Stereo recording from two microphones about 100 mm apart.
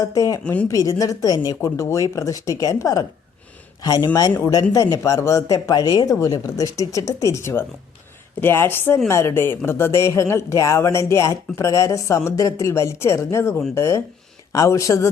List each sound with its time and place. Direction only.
0.0 s speech: 35° left (ahead or behind)
0.4 s a woman's voice: 15° left (ahead or behind)
0.7 s speech: 35° left (ahead or behind)
8.4 s speech: 20° left (ahead or behind)